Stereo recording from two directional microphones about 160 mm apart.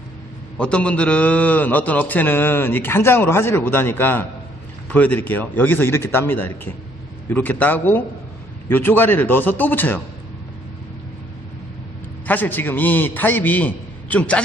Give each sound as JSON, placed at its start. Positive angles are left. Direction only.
{"t": 0.6, "sound": "a man's voice", "side_deg": 5}
{"t": 12.3, "sound": "a man's voice", "side_deg": 10}